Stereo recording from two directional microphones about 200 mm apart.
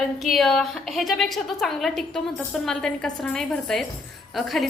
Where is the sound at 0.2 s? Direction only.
Centre (ahead or behind).